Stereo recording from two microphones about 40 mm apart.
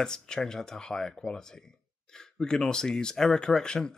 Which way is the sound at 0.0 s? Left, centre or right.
Centre.